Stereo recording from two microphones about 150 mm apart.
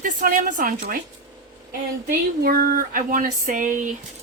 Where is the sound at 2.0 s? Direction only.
85° right; by 3.9 s 60° right (ahead or behind).